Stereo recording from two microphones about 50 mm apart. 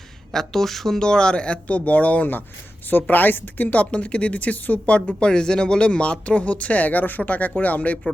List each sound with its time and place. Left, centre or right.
0.3 s a woman's voice: centre; by 4.9 s left
5.2 s a woman's voice: centre; by 7.9 s left